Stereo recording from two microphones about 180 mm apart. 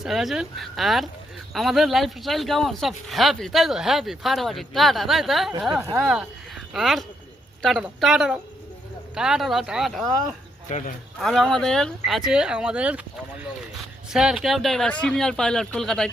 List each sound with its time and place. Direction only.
0.0 s speech: centre (ahead or behind)
10.7 s speech: 40° left (ahead or behind)
11.2 s speech: centre (ahead or behind)
14.1 s speech: 5° right (ahead or behind)